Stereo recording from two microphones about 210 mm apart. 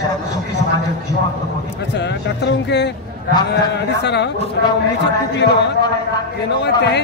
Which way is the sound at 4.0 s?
55° left (ahead or behind).